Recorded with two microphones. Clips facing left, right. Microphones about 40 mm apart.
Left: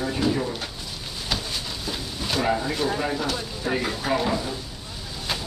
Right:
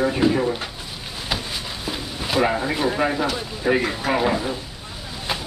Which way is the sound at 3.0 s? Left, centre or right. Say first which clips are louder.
Right 4 dB; right.